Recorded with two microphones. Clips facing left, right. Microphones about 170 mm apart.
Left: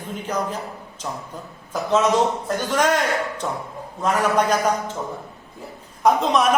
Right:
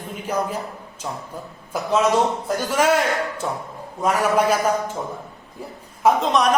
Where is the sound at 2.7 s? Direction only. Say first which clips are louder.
Right 1 dB; 5° right (ahead or behind).